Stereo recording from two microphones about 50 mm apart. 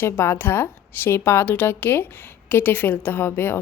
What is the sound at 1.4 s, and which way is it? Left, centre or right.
A woman's voice, left.